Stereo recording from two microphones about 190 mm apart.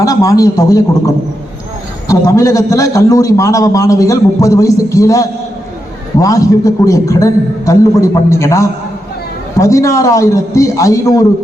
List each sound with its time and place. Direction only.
0.0 s a man's voice: 20° left (ahead or behind)